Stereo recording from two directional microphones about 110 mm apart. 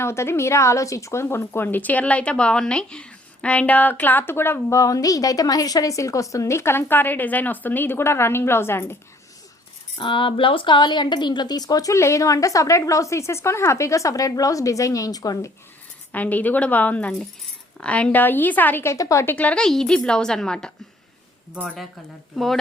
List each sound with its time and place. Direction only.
0.0 s speech: 25° left (ahead or behind)
10.0 s speech: 50° left (ahead or behind); by 15.5 s 30° left (ahead or behind)
16.1 s a woman's voice: 15° left (ahead or behind)